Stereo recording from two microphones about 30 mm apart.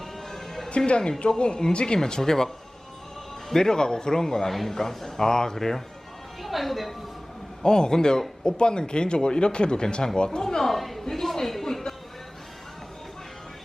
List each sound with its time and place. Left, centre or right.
0.0 s music: centre
0.9 s a man's voice: left
3.5 s speech: centre
4.4 s a man's voice: centre
6.4 s speech: centre
7.6 s speech: left
10.6 s a woman's voice: centre
11.1 s a sound: centre